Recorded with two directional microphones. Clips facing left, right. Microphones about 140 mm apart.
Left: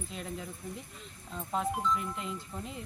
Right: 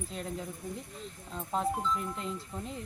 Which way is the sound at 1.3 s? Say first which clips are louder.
Right 1 dB; centre (ahead or behind).